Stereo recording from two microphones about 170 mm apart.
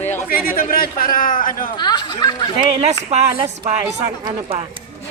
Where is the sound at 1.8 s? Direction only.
25° left (ahead or behind).